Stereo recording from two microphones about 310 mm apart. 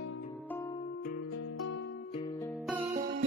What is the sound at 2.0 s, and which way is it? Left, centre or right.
Music, centre.